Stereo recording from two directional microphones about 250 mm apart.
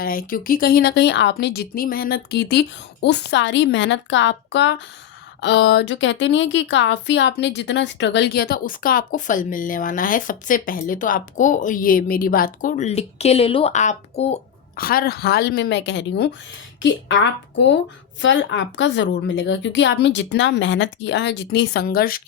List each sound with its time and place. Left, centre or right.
0.0 s speech: left